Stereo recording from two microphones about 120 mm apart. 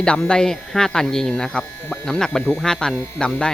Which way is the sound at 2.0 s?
5° left (ahead or behind).